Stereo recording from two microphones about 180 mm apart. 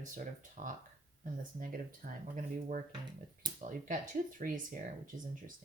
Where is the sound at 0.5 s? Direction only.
45° right (ahead or behind).